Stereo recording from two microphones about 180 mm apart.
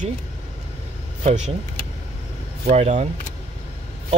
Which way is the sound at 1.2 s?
40° right (ahead or behind).